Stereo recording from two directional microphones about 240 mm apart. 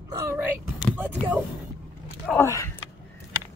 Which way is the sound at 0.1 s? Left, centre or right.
Centre.